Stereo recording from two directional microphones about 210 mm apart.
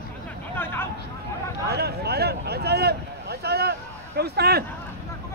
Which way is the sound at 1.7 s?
50° right (ahead or behind).